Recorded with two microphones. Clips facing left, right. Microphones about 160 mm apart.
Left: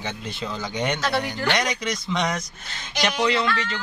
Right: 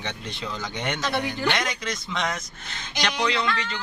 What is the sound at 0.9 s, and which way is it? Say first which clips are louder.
Speech: left 2 dB; 15° right (ahead or behind).